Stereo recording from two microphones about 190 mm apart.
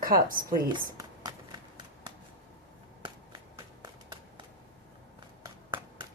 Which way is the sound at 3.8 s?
25° right (ahead or behind).